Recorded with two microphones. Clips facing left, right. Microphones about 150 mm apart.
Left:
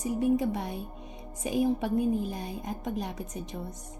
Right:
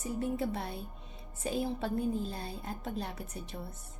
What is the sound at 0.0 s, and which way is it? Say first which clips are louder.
A woman's voice: left 7 dB; 15° left (ahead or behind).